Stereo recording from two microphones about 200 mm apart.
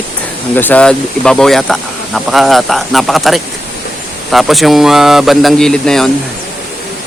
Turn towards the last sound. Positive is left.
turn(degrees=5)  # may be behind; listen again after turning